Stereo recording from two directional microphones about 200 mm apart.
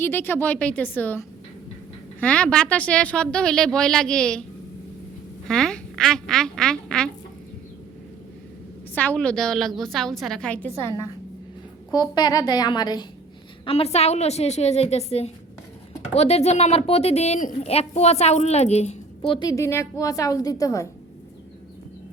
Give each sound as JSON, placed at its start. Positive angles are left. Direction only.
{"t": 0.0, "sound": "a woman's voice", "side_deg": 10}
{"t": 2.2, "sound": "a woman's voice", "side_deg": 5}
{"t": 5.5, "sound": "a woman's voice", "side_deg": 0}
{"t": 9.0, "sound": "a woman's voice", "side_deg": 5}
{"t": 11.9, "sound": "a woman's voice", "side_deg": 20}